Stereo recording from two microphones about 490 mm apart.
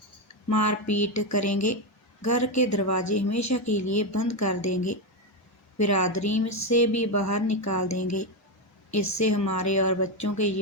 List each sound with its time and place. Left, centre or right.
0.5 s speech: left